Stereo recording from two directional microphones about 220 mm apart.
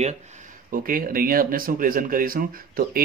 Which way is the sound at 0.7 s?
40° right (ahead or behind).